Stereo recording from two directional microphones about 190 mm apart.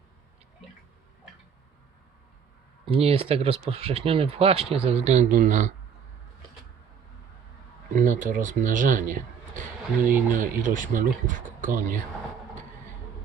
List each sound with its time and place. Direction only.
2.8 s speech: 30° right (ahead or behind)
7.9 s speech: 45° right (ahead or behind)
10.1 s speech: 10° right (ahead or behind)
10.3 s speech: 45° right (ahead or behind)